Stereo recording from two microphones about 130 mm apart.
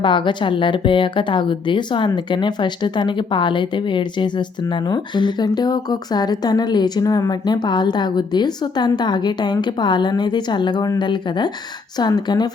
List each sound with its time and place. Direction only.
0.0 s speech: 40° left (ahead or behind)